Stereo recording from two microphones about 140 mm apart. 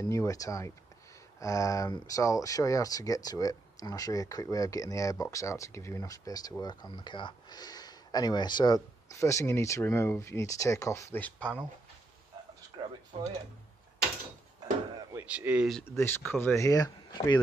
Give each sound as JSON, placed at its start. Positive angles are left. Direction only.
{"t": 0.0, "sound": "speech", "side_deg": 20}
{"t": 13.1, "sound": "speech", "side_deg": -45}
{"t": 15.2, "sound": "speech", "side_deg": -10}
{"t": 15.9, "sound": "speech", "side_deg": 15}